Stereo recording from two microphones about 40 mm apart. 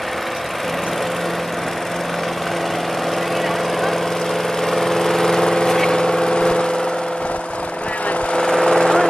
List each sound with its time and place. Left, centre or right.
4.6 s vehicle: centre
8.4 s vehicle: centre